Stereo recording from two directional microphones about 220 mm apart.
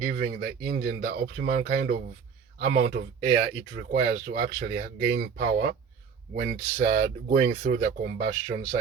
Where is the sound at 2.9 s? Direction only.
35° right (ahead or behind).